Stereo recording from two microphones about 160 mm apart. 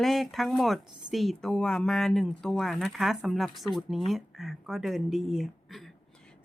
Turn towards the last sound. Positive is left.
turn(degrees=0)  # may be behind; listen again after turning